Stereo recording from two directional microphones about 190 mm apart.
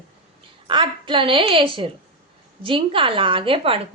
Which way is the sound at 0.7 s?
25° right (ahead or behind).